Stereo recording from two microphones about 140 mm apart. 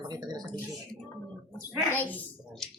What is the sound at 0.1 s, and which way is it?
Speech, 30° right (ahead or behind).